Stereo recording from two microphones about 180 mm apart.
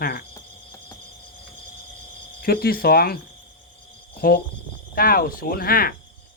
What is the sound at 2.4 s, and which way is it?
Speech, 60° left (ahead or behind).